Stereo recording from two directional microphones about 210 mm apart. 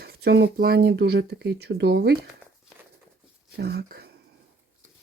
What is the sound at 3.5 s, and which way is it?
Speech, 50° right (ahead or behind).